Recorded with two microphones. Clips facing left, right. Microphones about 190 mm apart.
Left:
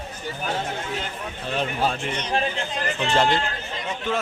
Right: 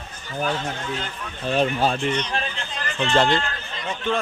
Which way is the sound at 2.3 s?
15° left (ahead or behind).